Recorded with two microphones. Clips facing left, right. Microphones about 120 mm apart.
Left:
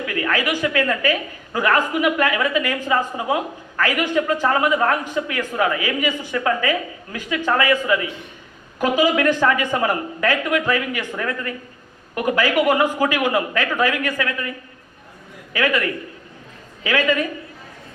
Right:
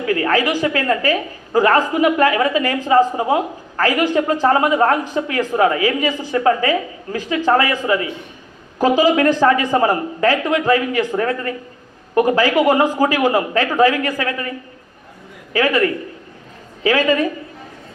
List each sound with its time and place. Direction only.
0.0 s a woman's voice: 35° right (ahead or behind)
15.5 s a woman's voice: 35° right (ahead or behind)